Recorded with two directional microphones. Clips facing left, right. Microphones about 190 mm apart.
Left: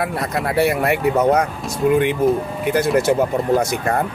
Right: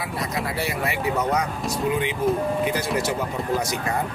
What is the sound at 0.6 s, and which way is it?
Speech, 60° left (ahead or behind).